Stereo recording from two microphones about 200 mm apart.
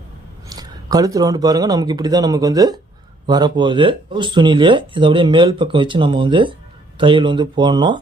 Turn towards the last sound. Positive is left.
turn(degrees=-20)  # may be behind; listen again after turning